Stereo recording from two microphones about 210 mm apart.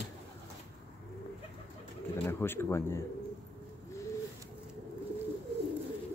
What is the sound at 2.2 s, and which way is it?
Speech, 10° left (ahead or behind).